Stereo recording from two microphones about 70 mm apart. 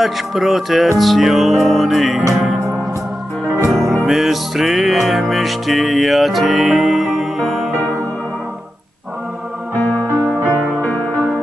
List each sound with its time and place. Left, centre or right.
0.0 s music: centre
3.7 s music: centre
10.0 s music: right